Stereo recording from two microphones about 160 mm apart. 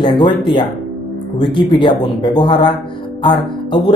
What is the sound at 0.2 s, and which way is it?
Speech, 30° left (ahead or behind).